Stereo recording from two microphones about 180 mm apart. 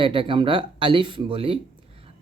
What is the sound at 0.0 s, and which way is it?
Speech, 30° right (ahead or behind).